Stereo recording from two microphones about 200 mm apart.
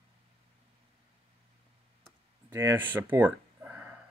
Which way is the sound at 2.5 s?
10° right (ahead or behind).